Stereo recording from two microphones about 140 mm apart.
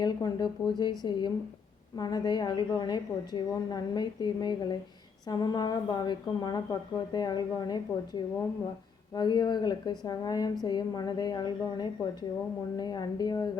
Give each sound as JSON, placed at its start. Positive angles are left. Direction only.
{"t": 0.0, "sound": "a woman's voice", "side_deg": 30}